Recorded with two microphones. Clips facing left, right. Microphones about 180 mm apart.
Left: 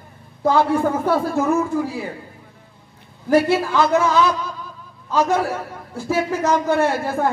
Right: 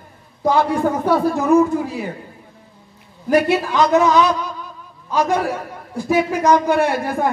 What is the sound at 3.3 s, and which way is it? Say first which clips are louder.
A man's voice: even; 15° right (ahead or behind).